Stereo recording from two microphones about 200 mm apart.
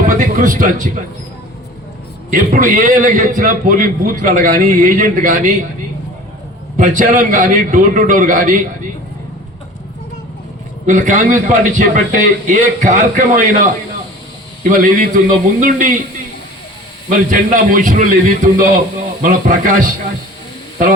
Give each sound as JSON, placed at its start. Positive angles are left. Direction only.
{"t": 0.0, "sound": "speech", "side_deg": -40}
{"t": 2.3, "sound": "a man's voice", "side_deg": -40}
{"t": 6.7, "sound": "a man's voice", "side_deg": -40}
{"t": 10.8, "sound": "a man's voice", "side_deg": -40}
{"t": 14.7, "sound": "a man's voice", "side_deg": -40}
{"t": 17.1, "sound": "a man's voice", "side_deg": -40}